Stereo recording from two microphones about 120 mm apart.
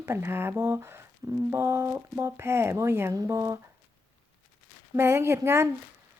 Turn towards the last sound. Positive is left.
turn(degrees=-20)  # may be behind; listen again after turning